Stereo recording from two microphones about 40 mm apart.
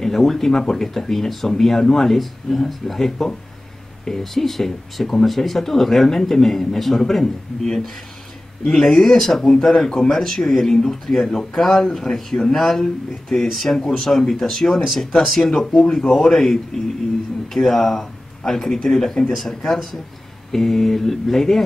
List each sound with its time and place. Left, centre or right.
0.0 s speech: centre
8.6 s speech: left
15.5 s speech: left; by 21.6 s centre